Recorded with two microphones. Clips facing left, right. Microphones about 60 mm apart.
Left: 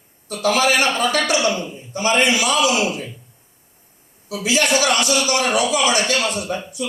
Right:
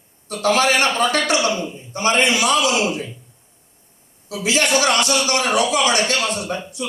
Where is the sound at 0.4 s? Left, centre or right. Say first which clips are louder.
Even; right.